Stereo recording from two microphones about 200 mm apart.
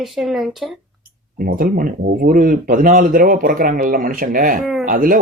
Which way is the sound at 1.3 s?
45° right (ahead or behind).